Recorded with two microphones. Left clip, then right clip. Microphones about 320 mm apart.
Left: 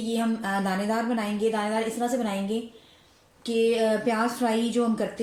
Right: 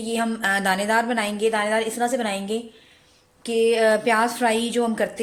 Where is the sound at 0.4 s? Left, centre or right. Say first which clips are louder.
Right 7 dB; right.